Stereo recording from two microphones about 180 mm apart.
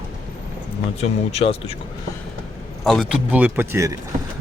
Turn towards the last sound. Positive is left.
turn(degrees=-15)  # may be behind; listen again after turning